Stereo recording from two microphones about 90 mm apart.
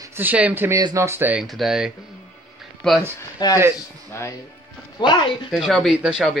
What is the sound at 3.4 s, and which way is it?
Speech, 50° left (ahead or behind).